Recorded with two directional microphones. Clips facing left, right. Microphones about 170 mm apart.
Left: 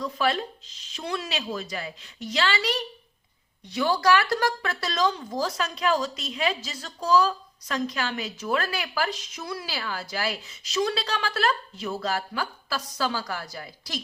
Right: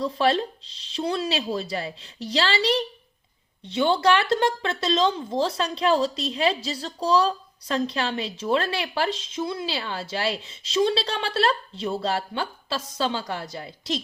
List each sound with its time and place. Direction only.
0.0 s speech: 30° right (ahead or behind)